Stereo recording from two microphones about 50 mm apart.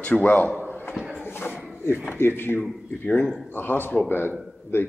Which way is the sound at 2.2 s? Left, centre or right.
Left.